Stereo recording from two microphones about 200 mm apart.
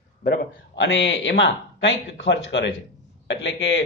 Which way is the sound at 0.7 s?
75° left (ahead or behind).